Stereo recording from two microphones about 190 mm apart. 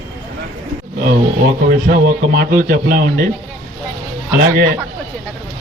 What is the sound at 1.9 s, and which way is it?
A man's voice, 50° right (ahead or behind).